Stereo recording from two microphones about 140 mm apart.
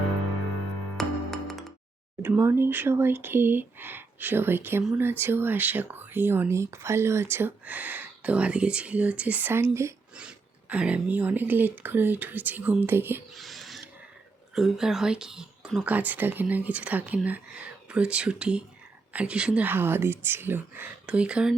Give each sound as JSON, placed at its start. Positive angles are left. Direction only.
{"t": 0.9, "sound": "music", "side_deg": 0}
{"t": 2.2, "sound": "speech", "side_deg": -15}
{"t": 10.2, "sound": "speech", "side_deg": -10}
{"t": 13.3, "sound": "a sound", "side_deg": 0}
{"t": 14.5, "sound": "speech", "side_deg": 0}